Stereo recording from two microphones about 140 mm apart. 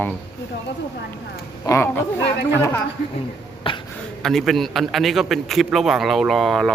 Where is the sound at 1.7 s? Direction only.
15° left (ahead or behind).